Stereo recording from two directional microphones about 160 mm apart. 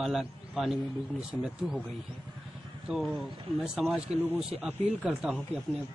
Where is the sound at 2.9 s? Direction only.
Centre (ahead or behind).